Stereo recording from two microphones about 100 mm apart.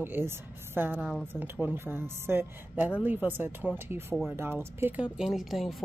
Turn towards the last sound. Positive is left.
turn(degrees=-5)  # may be behind; listen again after turning